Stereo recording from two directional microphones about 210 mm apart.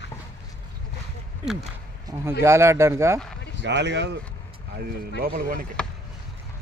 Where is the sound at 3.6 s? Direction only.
55° right (ahead or behind).